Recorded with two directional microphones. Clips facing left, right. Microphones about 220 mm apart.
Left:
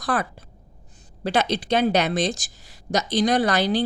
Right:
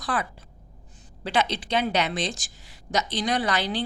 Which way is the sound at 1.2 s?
40° left (ahead or behind).